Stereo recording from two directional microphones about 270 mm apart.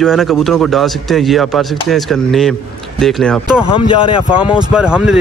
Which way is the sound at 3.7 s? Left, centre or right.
Centre.